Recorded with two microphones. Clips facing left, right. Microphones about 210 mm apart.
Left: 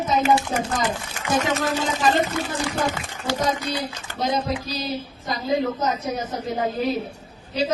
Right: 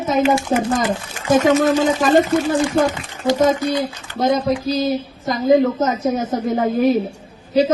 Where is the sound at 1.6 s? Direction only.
50° right (ahead or behind).